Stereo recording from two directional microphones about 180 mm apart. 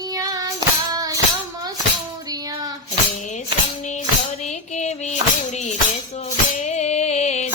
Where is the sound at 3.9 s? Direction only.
40° left (ahead or behind).